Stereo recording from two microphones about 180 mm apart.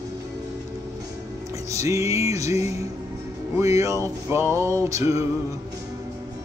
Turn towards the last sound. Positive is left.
turn(degrees=-15)  # may be behind; listen again after turning